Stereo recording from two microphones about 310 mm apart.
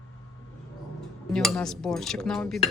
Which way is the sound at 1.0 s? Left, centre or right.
Centre.